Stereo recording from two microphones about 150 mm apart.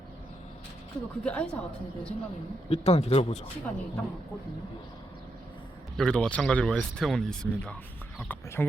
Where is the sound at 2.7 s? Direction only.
45° left (ahead or behind).